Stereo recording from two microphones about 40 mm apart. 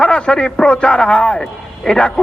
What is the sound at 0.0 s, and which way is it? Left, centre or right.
A man's voice, left.